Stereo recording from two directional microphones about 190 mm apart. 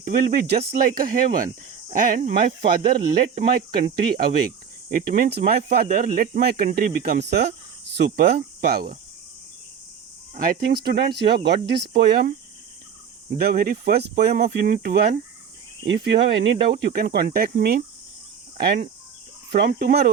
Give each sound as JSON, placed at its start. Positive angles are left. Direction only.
{"t": 0.0, "sound": "speech", "side_deg": -50}
{"t": 10.3, "sound": "speech", "side_deg": -50}
{"t": 13.3, "sound": "speech", "side_deg": -50}
{"t": 15.9, "sound": "speech", "side_deg": -65}
{"t": 18.5, "sound": "cricket", "side_deg": -55}
{"t": 19.5, "sound": "speech", "side_deg": -55}